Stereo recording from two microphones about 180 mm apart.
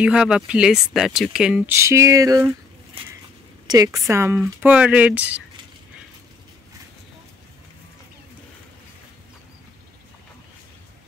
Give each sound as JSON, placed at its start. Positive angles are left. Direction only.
{"t": 0.0, "sound": "speech", "side_deg": -5}
{"t": 3.6, "sound": "speech", "side_deg": -20}